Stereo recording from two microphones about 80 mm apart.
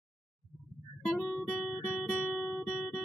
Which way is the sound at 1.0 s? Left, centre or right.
Centre.